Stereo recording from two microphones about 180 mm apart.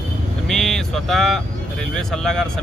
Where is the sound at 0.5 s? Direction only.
5° left (ahead or behind).